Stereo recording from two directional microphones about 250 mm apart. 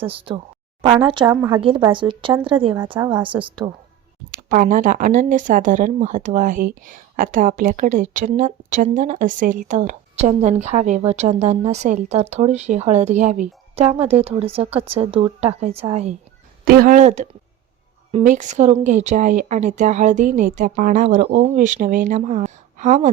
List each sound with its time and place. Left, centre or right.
0.0 s speech: right
4.3 s speech: right